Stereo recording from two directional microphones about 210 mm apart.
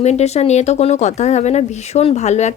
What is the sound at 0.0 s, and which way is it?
Speech, 30° left (ahead or behind).